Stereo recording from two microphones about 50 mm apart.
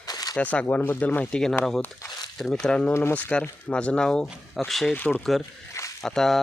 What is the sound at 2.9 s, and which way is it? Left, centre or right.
Speech, left.